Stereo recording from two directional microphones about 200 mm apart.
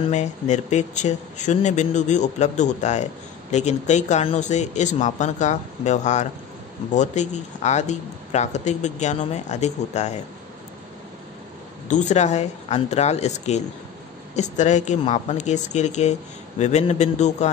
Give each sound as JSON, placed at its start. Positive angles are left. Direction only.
{"t": 0.1, "sound": "speech", "side_deg": 35}
{"t": 11.9, "sound": "speech", "side_deg": 35}